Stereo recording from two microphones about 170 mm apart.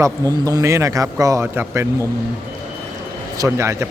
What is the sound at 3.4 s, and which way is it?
Speech, 15° right (ahead or behind).